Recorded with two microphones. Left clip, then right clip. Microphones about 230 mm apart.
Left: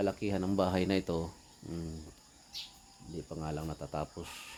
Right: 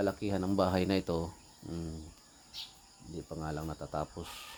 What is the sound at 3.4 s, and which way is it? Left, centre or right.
Speech, centre.